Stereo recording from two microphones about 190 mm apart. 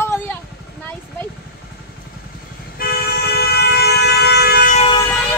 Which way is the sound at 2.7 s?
55° left (ahead or behind).